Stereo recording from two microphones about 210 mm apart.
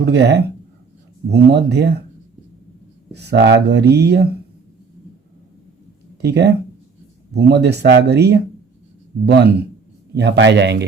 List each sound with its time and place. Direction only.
0.0 s speech: 55° right (ahead or behind)
3.1 s speech: 50° right (ahead or behind)
6.2 s speech: 50° right (ahead or behind)